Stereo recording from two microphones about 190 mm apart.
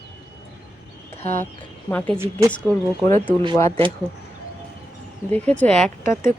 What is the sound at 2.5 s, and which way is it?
Speech, 5° left (ahead or behind).